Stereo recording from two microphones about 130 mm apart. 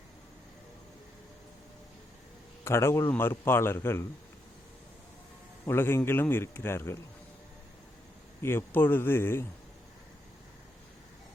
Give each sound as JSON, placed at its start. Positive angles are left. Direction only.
{"t": 2.6, "sound": "speech", "side_deg": 20}
{"t": 5.6, "sound": "speech", "side_deg": 20}
{"t": 8.4, "sound": "speech", "side_deg": 20}